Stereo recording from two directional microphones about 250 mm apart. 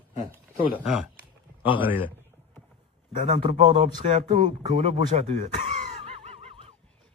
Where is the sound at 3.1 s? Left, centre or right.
Right.